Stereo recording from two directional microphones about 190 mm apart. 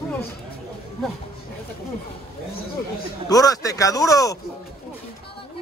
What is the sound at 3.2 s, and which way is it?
Speech, 20° left (ahead or behind).